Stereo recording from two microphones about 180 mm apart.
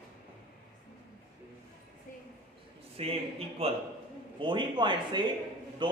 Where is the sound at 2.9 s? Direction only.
35° right (ahead or behind).